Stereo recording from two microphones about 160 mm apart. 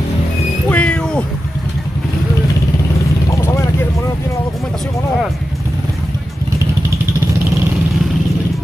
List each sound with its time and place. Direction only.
0.7 s cat: 10° left (ahead or behind)
3.3 s vehicle: 20° left (ahead or behind)